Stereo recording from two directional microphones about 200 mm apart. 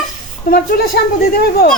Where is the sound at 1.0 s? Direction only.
50° left (ahead or behind).